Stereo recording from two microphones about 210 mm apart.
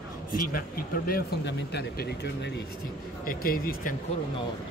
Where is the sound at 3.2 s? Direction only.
45° left (ahead or behind).